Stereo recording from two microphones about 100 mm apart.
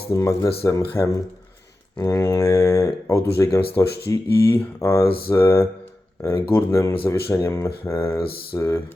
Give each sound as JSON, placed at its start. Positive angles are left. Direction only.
{"t": 0.1, "sound": "speech", "side_deg": 30}
{"t": 6.7, "sound": "speech", "side_deg": 35}